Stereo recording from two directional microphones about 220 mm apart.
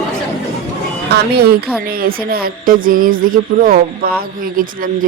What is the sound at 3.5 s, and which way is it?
Speech, 25° right (ahead or behind).